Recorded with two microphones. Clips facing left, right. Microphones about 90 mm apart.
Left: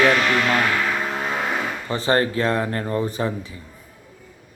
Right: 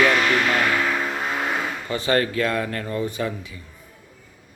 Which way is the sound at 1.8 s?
35° left (ahead or behind).